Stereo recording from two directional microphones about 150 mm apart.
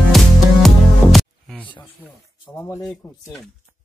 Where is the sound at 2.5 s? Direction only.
15° left (ahead or behind).